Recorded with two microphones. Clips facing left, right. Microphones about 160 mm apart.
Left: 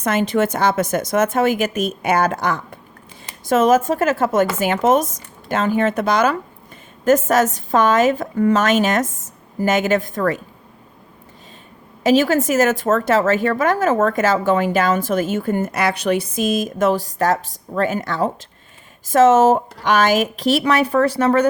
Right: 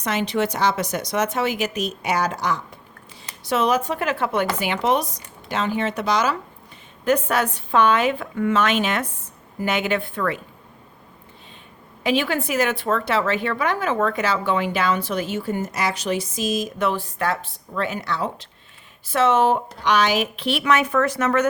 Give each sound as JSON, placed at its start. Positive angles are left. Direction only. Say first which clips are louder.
{"t": 0.0, "sound": "speech", "louder": "left 5 dB", "side_deg": 50}
{"t": 12.0, "sound": "speech", "louder": "left 7 dB", "side_deg": 40}